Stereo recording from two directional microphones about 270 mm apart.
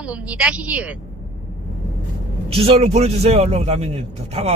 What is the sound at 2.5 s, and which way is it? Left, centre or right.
A man's voice, right.